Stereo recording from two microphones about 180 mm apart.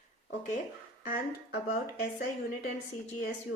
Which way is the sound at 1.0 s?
50° left (ahead or behind).